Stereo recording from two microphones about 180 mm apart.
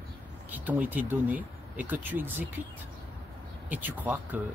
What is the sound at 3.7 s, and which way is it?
Speech, 10° right (ahead or behind).